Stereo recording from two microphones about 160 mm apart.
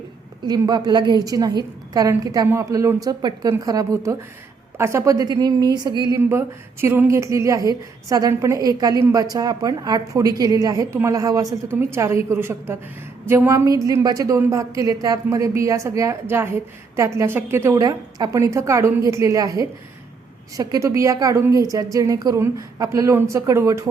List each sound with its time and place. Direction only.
0.4 s a woman's voice: 25° right (ahead or behind)
6.1 s a woman's voice: 15° right (ahead or behind)